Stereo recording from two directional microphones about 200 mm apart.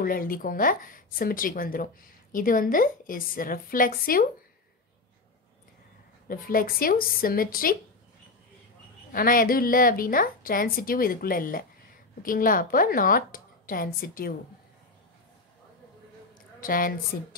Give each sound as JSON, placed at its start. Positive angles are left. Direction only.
{"t": 0.0, "sound": "a woman's voice", "side_deg": 45}
{"t": 6.2, "sound": "a woman's voice", "side_deg": 45}
{"t": 9.1, "sound": "a woman's voice", "side_deg": 45}
{"t": 16.6, "sound": "a woman's voice", "side_deg": 45}